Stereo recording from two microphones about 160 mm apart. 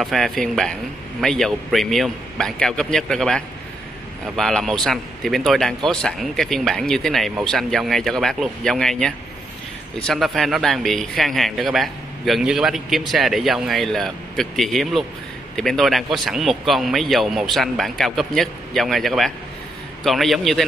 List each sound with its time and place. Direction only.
0.0 s speech: centre (ahead or behind)